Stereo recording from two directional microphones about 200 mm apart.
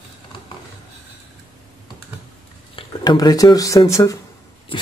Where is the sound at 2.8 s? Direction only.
20° left (ahead or behind).